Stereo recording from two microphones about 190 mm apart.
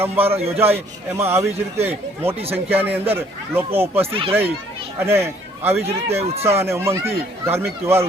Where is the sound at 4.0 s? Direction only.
30° right (ahead or behind).